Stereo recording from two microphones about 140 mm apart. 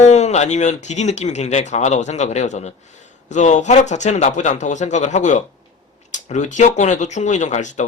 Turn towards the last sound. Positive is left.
turn(degrees=60)  # may be behind; listen again after turning